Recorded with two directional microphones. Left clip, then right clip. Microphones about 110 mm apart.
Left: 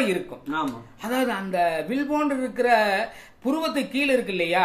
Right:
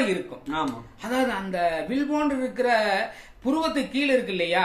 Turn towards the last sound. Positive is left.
turn(degrees=35)  # may be behind; listen again after turning